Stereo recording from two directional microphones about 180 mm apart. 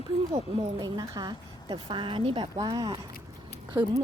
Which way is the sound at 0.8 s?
20° right (ahead or behind).